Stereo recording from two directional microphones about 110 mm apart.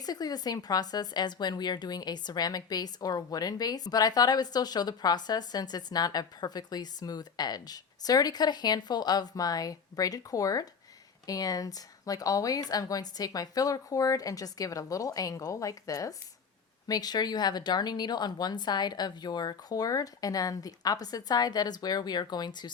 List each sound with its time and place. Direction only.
0.0 s speech: 35° left (ahead or behind)